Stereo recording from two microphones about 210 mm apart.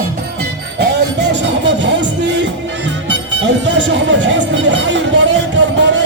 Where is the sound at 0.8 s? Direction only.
55° right (ahead or behind).